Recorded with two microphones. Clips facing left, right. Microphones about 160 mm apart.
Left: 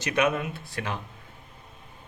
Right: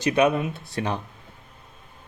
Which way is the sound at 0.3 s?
25° right (ahead or behind).